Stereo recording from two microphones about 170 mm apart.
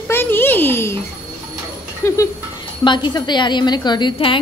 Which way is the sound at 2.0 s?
15° left (ahead or behind).